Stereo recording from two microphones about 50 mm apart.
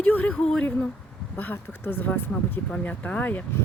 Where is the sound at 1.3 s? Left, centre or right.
Left.